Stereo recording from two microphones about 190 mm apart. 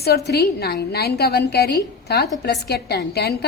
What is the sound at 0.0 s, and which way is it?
A woman's voice, 55° left (ahead or behind).